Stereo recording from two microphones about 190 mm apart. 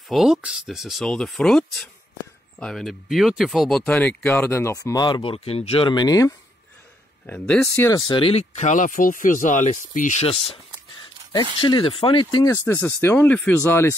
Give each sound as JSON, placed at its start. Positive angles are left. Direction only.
{"t": 0.1, "sound": "speech", "side_deg": 0}
{"t": 7.2, "sound": "speech", "side_deg": 5}
{"t": 8.1, "sound": "speech", "side_deg": 30}
{"t": 11.6, "sound": "speech", "side_deg": 25}